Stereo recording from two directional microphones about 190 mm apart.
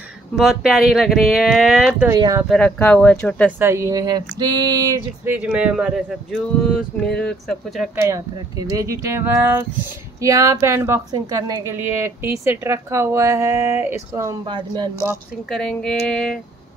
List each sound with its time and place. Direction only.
0.4 s speech: centre (ahead or behind)
2.1 s speech: 20° right (ahead or behind)
2.5 s speech: 5° left (ahead or behind)
3.5 s a woman's voice: 15° right (ahead or behind)
7.9 s a woman's voice: 15° right (ahead or behind)
15.5 s speech: centre (ahead or behind)